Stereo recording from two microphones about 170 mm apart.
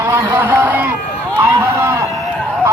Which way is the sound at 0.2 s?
15° right (ahead or behind).